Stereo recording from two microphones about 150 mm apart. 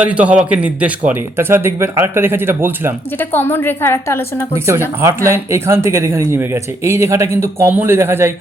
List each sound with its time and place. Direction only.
0.0 s speech: 10° right (ahead or behind)
3.2 s a woman's voice: 15° left (ahead or behind)
4.9 s speech: 15° right (ahead or behind)